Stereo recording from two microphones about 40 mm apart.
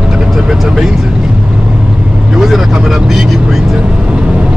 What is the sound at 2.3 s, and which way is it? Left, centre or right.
Speech, centre.